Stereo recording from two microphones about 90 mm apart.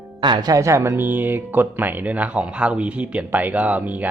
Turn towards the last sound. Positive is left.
turn(degrees=-15)  # may be behind; listen again after turning